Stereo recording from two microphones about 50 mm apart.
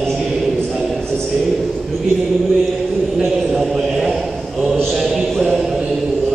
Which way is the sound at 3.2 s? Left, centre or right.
Centre.